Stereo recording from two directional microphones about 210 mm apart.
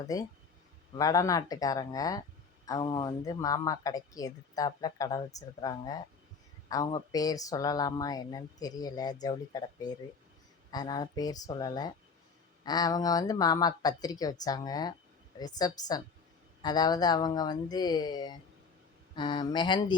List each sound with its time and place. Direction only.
0.0 s speech: 15° left (ahead or behind)